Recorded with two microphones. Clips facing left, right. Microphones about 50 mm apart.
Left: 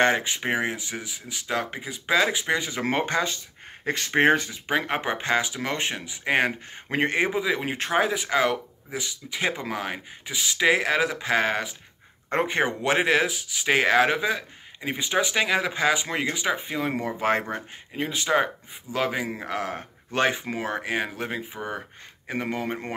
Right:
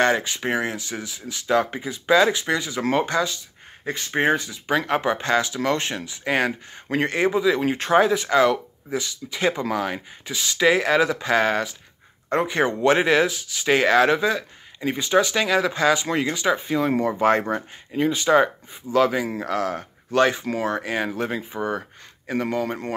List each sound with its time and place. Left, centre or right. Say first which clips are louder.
0.0 s speech: right 1 dB; left
2.6 s speech: right 3 dB; left
3.8 s speech: left 1 dB; left
4.5 s speech: right 3 dB; left
12.3 s speech: right 2 dB; left
12.5 s speech: right 6 dB; centre
22.3 s speech: right 4 dB; centre